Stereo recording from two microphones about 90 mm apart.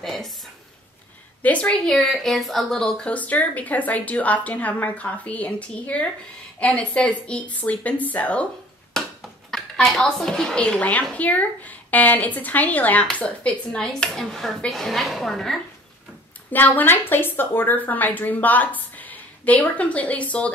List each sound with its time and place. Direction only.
0.0 s a sound: centre (ahead or behind)
1.4 s speech: 15° left (ahead or behind)
8.9 s speech: 5° left (ahead or behind)
16.5 s a woman's voice: 20° left (ahead or behind)